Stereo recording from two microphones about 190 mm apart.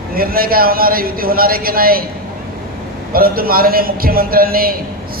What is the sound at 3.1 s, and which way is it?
A man's voice, 50° right (ahead or behind).